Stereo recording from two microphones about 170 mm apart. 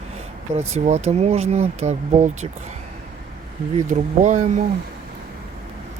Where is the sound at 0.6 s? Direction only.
40° right (ahead or behind).